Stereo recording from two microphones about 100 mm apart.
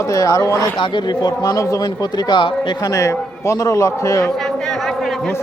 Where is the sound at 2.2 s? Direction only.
50° left (ahead or behind).